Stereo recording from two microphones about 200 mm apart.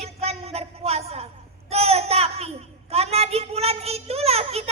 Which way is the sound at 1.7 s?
30° right (ahead or behind).